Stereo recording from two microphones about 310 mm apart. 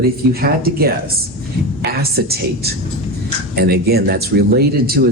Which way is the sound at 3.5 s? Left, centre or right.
Right.